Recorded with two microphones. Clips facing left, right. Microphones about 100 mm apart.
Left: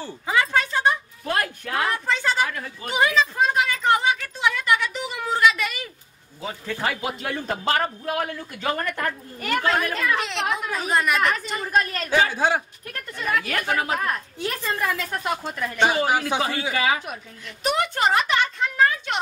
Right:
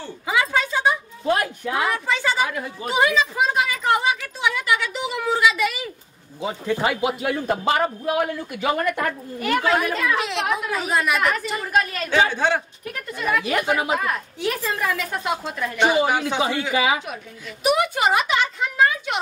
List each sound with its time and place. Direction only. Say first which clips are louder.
0.3 s a sound: even; 5° right (ahead or behind)
6.4 s a man's voice: right 5 dB; 20° right (ahead or behind)
12.3 s speech: right 1 dB; 5° left (ahead or behind)
12.9 s a man's voice: right 2 dB; 10° right (ahead or behind)
16.1 s speech: even; 5° left (ahead or behind)
16.7 s a man's voice: right 2 dB; 10° right (ahead or behind)